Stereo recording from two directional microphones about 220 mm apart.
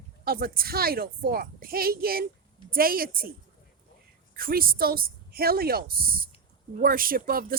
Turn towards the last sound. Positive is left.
turn(degrees=-40)  # may be behind; listen again after turning